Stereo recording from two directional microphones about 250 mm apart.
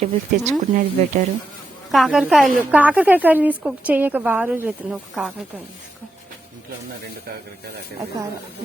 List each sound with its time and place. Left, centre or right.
0.0 s speech: right
1.9 s a woman's voice: centre